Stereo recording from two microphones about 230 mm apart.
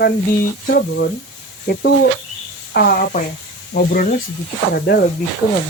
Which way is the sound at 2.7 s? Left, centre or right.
Left.